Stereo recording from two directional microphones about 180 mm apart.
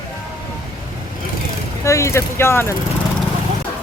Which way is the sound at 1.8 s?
15° left (ahead or behind).